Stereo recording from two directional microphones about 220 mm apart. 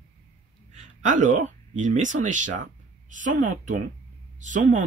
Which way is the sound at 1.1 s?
35° right (ahead or behind).